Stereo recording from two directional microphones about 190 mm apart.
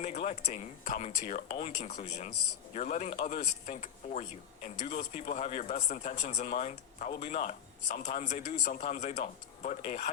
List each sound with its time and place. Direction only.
0.0 s speech: 35° left (ahead or behind)